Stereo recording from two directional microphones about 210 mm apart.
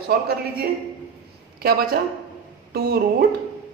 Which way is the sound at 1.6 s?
45° right (ahead or behind).